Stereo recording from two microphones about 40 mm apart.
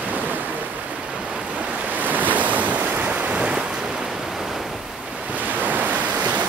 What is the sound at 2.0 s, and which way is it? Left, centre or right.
Waves, right.